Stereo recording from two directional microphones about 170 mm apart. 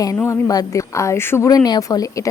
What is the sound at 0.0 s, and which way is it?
A woman's voice, 20° left (ahead or behind).